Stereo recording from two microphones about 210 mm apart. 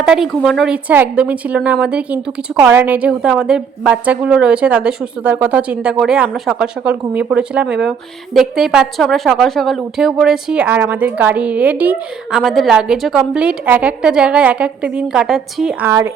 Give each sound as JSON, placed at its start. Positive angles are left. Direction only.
{"t": 0.0, "sound": "a woman's voice", "side_deg": 0}
{"t": 15.9, "sound": "speech", "side_deg": -15}